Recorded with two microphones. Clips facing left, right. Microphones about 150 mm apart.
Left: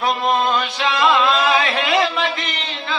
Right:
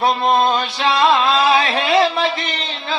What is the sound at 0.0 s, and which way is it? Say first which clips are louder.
Music: right 3 dB; 30° right (ahead or behind).